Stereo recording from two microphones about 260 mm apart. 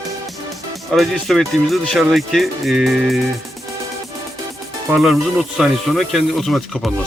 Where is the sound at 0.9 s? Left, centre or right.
Centre.